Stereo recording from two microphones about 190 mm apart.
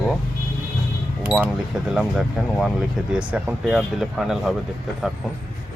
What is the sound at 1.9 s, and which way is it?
Speech, centre (ahead or behind).